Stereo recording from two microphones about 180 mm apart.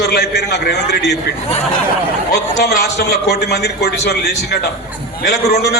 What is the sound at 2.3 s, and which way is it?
A man's voice, 65° left (ahead or behind).